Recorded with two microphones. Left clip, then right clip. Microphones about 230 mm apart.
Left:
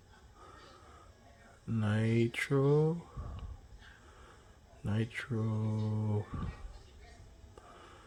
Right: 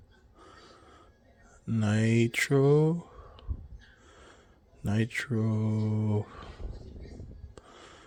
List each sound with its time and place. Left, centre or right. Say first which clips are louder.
1.6 s mantra: right 6 dB; right
4.9 s mantra: right 7 dB; right
7.7 s a sound: right 4 dB; right